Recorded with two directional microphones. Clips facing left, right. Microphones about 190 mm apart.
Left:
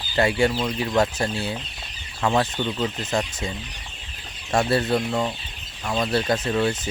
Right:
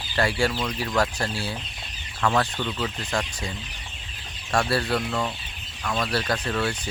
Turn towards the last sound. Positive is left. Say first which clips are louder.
# left 4 dB
turn(degrees=20)  # may be behind; listen again after turning